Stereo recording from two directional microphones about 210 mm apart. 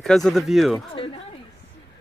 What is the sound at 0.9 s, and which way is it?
Speech, 25° left (ahead or behind).